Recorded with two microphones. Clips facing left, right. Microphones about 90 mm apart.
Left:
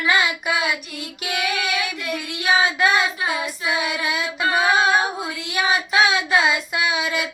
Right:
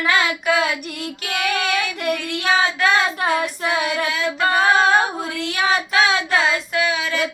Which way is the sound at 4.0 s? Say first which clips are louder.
Right 1 dB; 15° left (ahead or behind).